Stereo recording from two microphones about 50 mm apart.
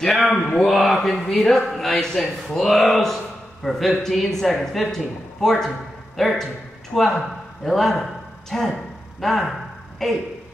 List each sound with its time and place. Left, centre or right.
0.2 s a man's voice: left
0.6 s a man's voice: centre